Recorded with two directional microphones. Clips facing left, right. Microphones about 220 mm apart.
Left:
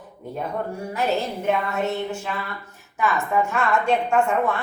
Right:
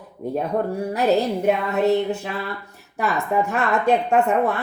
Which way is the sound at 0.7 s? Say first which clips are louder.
Right 5 dB; 35° right (ahead or behind).